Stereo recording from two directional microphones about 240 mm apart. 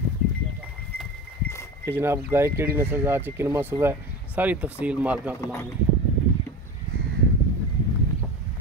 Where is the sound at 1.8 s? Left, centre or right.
Centre.